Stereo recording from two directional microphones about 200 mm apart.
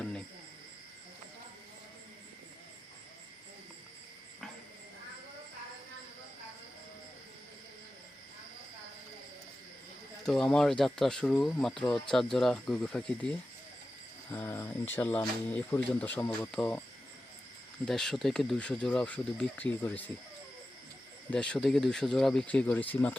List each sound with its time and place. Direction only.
10.2 s speech: 5° left (ahead or behind)
17.8 s speech: centre (ahead or behind)
21.2 s speech: 5° left (ahead or behind)